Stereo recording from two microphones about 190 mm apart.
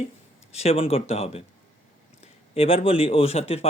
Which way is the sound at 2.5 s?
30° left (ahead or behind).